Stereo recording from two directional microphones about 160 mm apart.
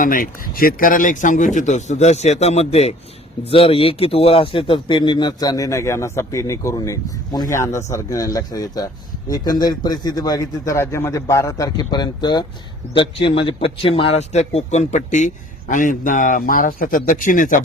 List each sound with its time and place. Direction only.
0.0 s speech: 60° left (ahead or behind)